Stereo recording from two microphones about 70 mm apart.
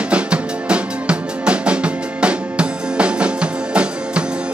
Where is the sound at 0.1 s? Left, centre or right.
Centre.